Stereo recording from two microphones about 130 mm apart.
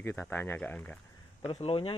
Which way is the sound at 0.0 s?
15° left (ahead or behind).